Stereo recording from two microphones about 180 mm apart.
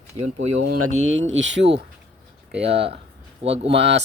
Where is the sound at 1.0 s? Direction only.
90° right.